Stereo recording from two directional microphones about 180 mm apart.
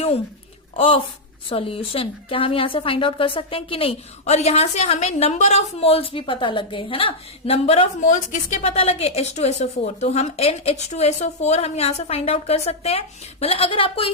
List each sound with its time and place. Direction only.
0.8 s a woman's voice: 30° left (ahead or behind)